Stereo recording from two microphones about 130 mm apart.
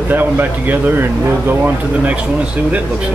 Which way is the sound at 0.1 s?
15° right (ahead or behind).